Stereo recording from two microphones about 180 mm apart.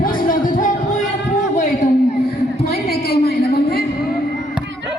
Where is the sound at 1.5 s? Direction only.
45° left (ahead or behind).